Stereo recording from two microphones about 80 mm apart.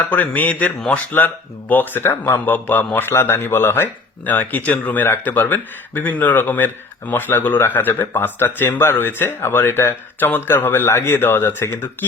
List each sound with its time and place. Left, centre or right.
0.1 s speech: left